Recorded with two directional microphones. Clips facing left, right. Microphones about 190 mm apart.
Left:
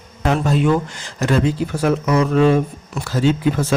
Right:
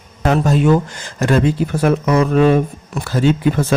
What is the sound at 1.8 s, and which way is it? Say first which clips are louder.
Speech: right 2 dB; 55° right (ahead or behind).